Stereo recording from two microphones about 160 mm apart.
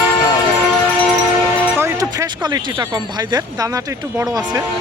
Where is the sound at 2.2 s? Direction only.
25° right (ahead or behind).